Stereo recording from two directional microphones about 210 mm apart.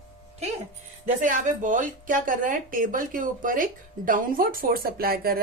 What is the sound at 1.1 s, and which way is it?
A woman's voice, 40° right (ahead or behind).